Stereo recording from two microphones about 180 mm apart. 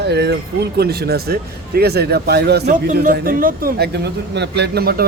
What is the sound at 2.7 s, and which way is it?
Speech, 45° right (ahead or behind).